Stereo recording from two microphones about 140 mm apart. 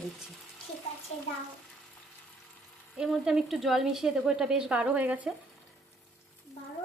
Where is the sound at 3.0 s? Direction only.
5° right (ahead or behind).